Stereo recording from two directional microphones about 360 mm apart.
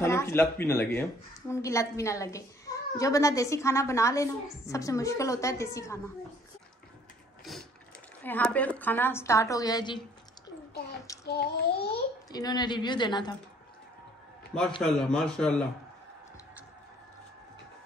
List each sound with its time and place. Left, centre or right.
0.0 s a woman's voice: centre
8.2 s a woman's voice: centre
11.2 s child singing: left
12.3 s a woman's voice: centre
14.8 s a woman's voice: centre